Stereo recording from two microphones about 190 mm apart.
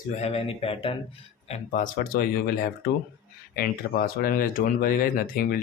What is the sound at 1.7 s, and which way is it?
Speech, 45° left (ahead or behind).